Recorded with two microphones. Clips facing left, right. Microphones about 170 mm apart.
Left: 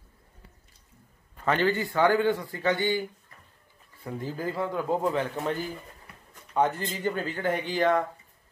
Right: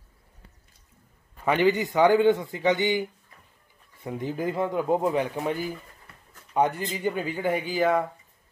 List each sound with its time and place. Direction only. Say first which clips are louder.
1.4 s a man's voice: right 3 dB; 15° right (ahead or behind)